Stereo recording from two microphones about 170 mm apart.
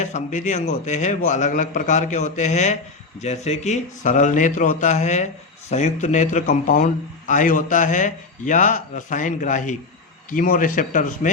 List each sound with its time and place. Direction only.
0.0 s a man's voice: 45° left (ahead or behind)